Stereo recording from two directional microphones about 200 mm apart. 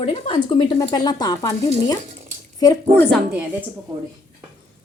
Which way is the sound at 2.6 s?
20° left (ahead or behind).